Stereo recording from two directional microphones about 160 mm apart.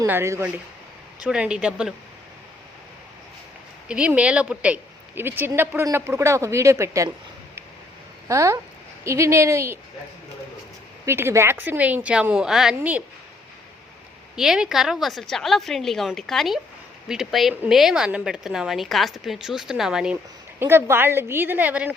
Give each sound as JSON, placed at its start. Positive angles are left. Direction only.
{"t": 0.0, "sound": "a woman's voice", "side_deg": -15}
{"t": 3.8, "sound": "speech", "side_deg": -5}
{"t": 8.3, "sound": "speech", "side_deg": -20}
{"t": 11.0, "sound": "speech", "side_deg": -15}
{"t": 14.3, "sound": "a woman's voice", "side_deg": -5}
{"t": 20.6, "sound": "speech", "side_deg": -15}